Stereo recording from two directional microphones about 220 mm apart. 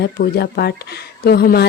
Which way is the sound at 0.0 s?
45° left (ahead or behind).